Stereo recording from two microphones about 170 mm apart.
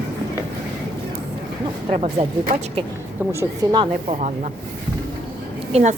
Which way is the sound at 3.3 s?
20° right (ahead or behind).